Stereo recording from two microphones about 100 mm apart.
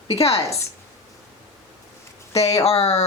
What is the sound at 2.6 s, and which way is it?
Speech, 90° left.